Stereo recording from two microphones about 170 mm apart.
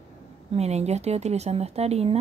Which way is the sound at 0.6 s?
40° right (ahead or behind).